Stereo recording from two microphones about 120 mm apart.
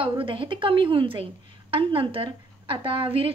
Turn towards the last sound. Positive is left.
turn(degrees=-45)  # may be behind; listen again after turning